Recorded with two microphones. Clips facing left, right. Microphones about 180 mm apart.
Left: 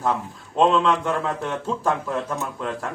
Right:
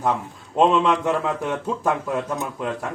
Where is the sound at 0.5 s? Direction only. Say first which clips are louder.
Right 1 dB; 10° right (ahead or behind).